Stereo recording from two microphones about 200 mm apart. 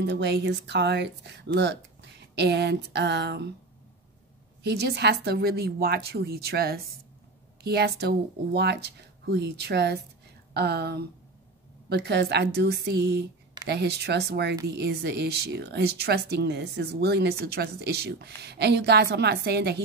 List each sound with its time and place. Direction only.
0.0 s speech: 60° right (ahead or behind)
4.6 s a woman's voice: 55° right (ahead or behind)